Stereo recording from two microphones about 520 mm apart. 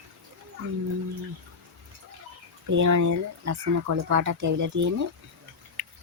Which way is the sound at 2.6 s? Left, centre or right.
Right.